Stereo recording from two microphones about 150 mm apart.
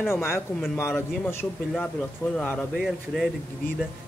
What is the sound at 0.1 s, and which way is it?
Speech, 15° left (ahead or behind).